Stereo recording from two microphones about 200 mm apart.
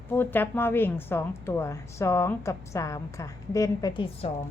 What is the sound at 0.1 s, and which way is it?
A woman's voice, 10° left (ahead or behind).